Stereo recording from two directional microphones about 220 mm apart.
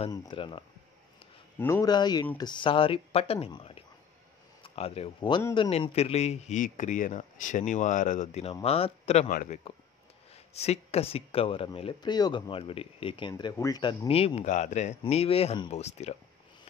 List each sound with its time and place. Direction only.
0.1 s a man's voice: 20° left (ahead or behind)